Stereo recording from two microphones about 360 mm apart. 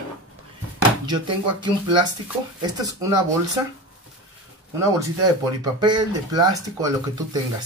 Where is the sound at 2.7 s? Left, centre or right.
Centre.